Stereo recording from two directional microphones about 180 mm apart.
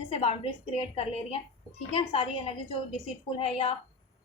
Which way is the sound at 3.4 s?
35° left (ahead or behind).